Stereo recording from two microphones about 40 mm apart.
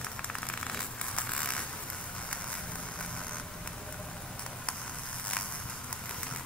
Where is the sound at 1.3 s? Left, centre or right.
Left.